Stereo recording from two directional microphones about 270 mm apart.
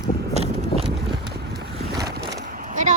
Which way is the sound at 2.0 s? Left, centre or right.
Right.